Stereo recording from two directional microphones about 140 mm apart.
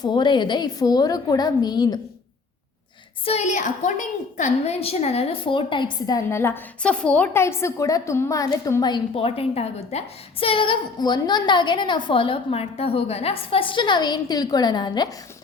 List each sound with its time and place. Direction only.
0.0 s a woman's voice: 30° left (ahead or behind)
3.2 s a woman's voice: 50° left (ahead or behind); by 9.0 s 25° left (ahead or behind)
9.1 s a woman's voice: 45° left (ahead or behind)